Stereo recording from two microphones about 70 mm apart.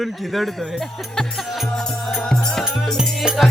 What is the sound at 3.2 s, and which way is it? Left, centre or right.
Speech, centre.